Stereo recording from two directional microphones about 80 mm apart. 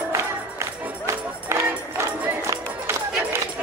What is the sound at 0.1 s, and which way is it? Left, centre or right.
Music, right.